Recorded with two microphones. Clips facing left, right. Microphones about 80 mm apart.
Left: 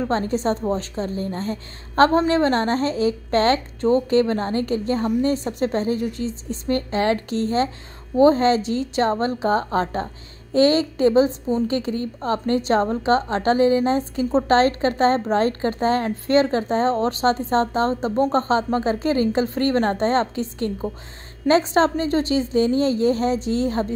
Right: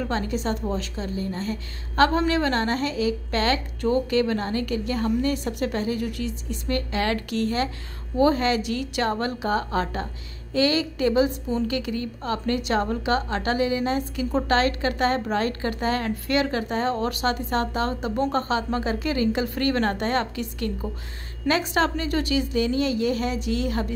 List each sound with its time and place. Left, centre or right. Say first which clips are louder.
0.0 s a woman's voice: left 5 dB; left